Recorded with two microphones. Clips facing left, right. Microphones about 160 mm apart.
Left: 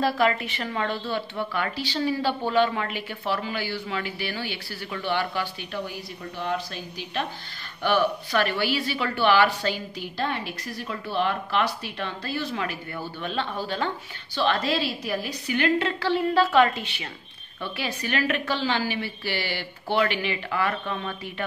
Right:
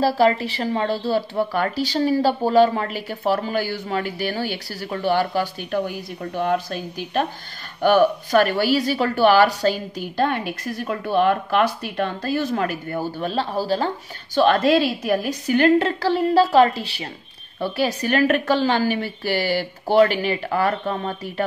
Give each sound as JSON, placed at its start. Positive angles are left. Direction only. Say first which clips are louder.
{"t": 0.0, "sound": "a woman's voice", "louder": "right 5 dB", "side_deg": -35}